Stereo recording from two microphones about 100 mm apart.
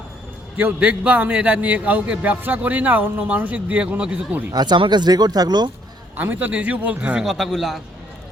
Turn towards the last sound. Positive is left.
turn(degrees=0)  # may be behind; listen again after turning